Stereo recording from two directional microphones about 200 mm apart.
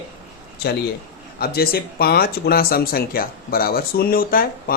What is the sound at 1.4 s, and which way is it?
Speech, 50° left (ahead or behind).